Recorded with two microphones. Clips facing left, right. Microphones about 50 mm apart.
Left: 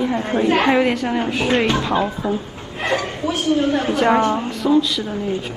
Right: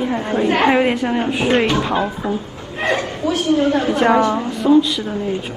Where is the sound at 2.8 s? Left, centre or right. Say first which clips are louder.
Right 2 dB; right.